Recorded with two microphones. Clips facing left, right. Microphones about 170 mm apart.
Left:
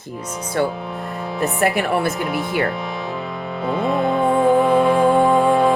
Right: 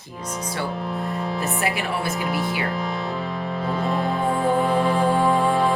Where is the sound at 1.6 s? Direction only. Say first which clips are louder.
Left 8 dB; 55° left (ahead or behind).